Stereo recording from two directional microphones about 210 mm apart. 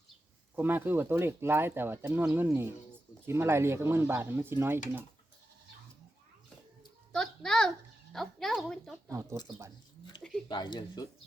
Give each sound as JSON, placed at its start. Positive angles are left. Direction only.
{"t": 0.5, "sound": "speech", "side_deg": -10}
{"t": 7.1, "sound": "a sound", "side_deg": 5}
{"t": 8.1, "sound": "speech", "side_deg": 0}
{"t": 9.0, "sound": "speech", "side_deg": -15}
{"t": 10.5, "sound": "speech", "side_deg": 20}